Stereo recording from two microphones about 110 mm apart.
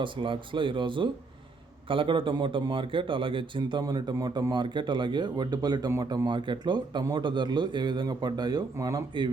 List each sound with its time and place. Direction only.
0.0 s a man's voice: 50° right (ahead or behind); by 9.0 s 35° right (ahead or behind)